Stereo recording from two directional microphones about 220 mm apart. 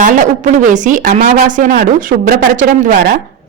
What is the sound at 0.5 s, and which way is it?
Speech, 35° right (ahead or behind).